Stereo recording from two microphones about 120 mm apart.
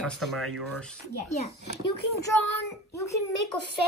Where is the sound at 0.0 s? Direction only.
Centre (ahead or behind).